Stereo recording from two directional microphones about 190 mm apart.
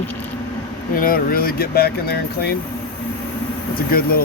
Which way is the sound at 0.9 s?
50° left (ahead or behind).